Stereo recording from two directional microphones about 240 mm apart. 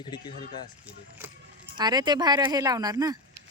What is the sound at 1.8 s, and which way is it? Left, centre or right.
Speech, centre.